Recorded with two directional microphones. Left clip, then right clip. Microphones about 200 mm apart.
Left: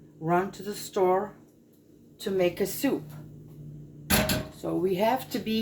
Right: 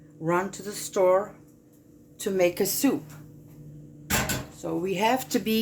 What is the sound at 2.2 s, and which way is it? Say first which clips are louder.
Speech: right 2 dB; 65° right (ahead or behind).